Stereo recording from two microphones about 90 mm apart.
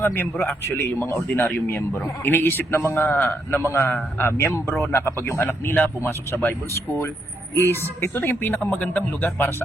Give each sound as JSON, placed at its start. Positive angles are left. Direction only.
{"t": 0.0, "sound": "a man's voice", "side_deg": 25}
{"t": 7.5, "sound": "a man's voice", "side_deg": 25}